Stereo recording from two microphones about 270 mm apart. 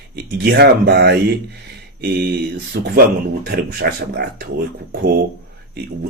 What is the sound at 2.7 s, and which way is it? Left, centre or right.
Speech, right.